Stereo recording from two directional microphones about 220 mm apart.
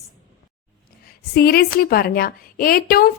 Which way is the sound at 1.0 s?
45° left (ahead or behind).